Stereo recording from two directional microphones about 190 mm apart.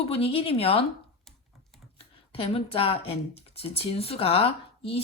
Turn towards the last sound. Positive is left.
turn(degrees=30)  # may be behind; listen again after turning